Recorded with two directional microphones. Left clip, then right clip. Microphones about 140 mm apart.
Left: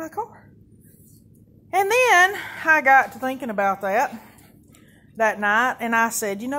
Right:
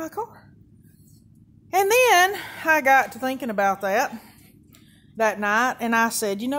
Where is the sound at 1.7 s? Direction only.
25° right (ahead or behind).